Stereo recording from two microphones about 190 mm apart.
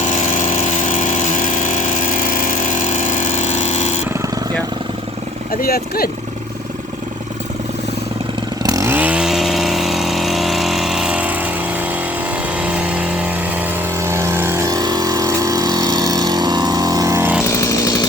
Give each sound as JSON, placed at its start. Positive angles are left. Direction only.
{"t": 0.0, "sound": "power tool", "side_deg": 40}
{"t": 5.5, "sound": "speech", "side_deg": 50}
{"t": 8.6, "sound": "chainsaw", "side_deg": -15}
{"t": 12.5, "sound": "vehicle", "side_deg": -5}
{"t": 17.4, "sound": "chainsaw", "side_deg": 15}